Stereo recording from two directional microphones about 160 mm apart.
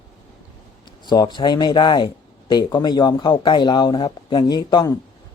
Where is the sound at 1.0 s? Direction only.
25° left (ahead or behind).